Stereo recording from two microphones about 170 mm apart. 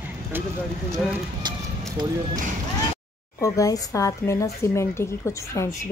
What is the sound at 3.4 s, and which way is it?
A woman's voice, 20° left (ahead or behind).